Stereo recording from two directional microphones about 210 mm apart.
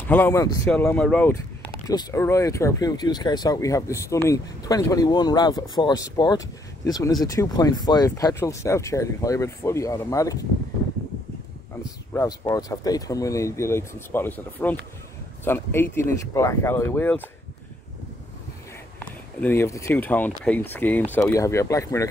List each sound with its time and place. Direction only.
0.1 s speech: 10° left (ahead or behind)
12.1 s speech: 15° left (ahead or behind)
19.4 s speech: 10° left (ahead or behind)